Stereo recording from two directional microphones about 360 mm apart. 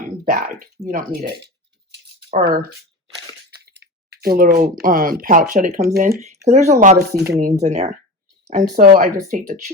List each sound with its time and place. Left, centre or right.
0.3 s speech: right
3.7 s speech: right